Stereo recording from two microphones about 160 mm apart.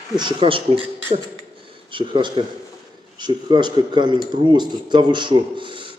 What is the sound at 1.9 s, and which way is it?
Speech, 30° right (ahead or behind).